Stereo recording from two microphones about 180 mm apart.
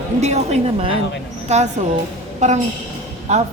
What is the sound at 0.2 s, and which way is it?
A woman's voice, 35° right (ahead or behind).